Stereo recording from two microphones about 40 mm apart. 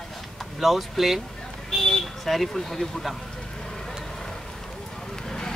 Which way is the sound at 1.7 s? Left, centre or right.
Centre.